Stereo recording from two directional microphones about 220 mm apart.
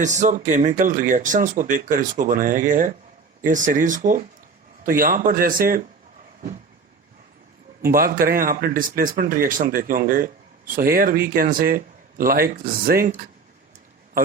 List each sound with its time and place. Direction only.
0.0 s speech: 35° right (ahead or behind)
7.9 s speech: 40° right (ahead or behind)